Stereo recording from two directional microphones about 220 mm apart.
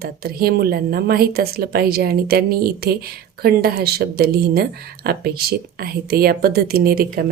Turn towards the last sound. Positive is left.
turn(degrees=-45)  # may be behind; listen again after turning